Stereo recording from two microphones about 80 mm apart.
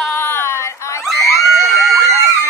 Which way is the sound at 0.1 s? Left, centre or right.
Left.